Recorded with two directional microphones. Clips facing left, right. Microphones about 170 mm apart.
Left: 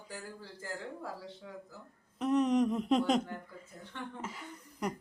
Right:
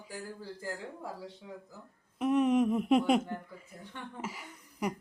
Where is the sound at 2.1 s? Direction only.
10° right (ahead or behind).